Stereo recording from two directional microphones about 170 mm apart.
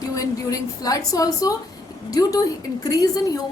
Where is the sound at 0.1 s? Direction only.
20° left (ahead or behind).